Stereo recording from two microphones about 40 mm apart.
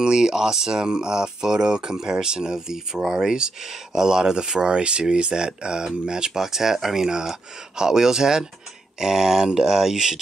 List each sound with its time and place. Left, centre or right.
0.0 s speech: centre